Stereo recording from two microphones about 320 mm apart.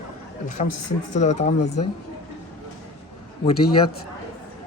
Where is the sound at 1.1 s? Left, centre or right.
Left.